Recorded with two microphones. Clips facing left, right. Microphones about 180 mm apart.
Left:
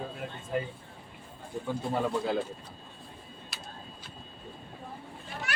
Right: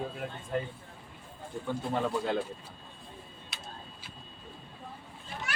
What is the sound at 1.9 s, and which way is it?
Speech, 5° left (ahead or behind).